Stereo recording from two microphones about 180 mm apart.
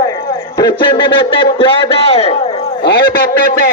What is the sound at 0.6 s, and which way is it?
A man's voice, 25° left (ahead or behind).